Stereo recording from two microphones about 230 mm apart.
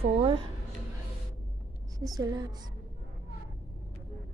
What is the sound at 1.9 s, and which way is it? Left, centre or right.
Speech, centre.